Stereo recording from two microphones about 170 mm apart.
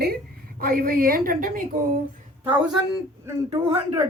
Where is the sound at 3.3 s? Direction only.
20° right (ahead or behind).